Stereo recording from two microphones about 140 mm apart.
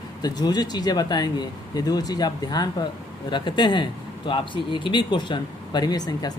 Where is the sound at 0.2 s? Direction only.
30° left (ahead or behind).